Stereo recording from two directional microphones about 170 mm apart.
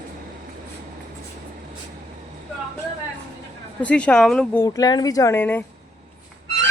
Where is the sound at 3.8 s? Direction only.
5° left (ahead or behind).